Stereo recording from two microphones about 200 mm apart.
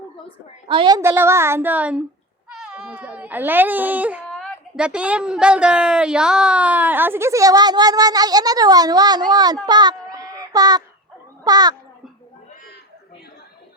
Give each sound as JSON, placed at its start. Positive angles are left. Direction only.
{"t": 0.7, "sound": "speech", "side_deg": -25}
{"t": 9.6, "sound": "child singing", "side_deg": -20}
{"t": 11.4, "sound": "a child's voice", "side_deg": -20}